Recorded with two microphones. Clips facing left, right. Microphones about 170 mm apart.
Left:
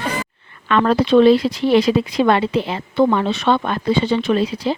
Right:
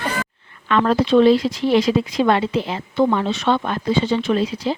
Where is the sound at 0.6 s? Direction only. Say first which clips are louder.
Left 1 dB; 65° left (ahead or behind).